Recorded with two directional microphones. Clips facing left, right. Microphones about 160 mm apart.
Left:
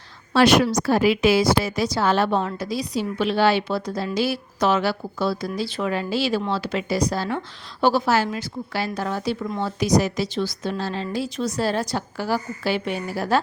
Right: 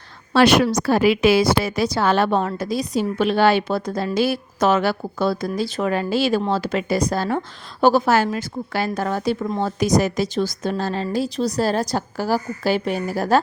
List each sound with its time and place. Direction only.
0.3 s a woman's voice: 65° right (ahead or behind); by 13.4 s 45° right (ahead or behind)